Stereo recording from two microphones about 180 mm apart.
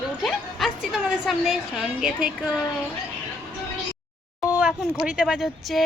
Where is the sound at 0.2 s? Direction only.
Centre (ahead or behind).